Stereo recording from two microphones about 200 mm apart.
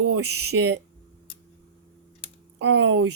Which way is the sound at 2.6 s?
65° right (ahead or behind).